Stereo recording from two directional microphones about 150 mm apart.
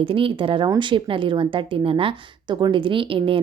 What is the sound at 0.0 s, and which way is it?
A woman's voice, 35° right (ahead or behind).